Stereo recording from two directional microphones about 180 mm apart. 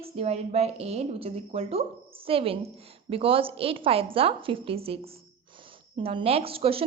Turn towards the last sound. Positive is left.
turn(degrees=-30)  # may be behind; listen again after turning